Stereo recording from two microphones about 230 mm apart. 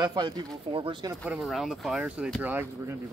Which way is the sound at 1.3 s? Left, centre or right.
Centre.